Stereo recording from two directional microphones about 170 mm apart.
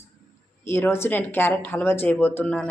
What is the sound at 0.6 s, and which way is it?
Speech, 15° left (ahead or behind).